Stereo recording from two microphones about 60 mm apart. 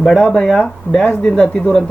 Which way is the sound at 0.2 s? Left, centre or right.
Centre.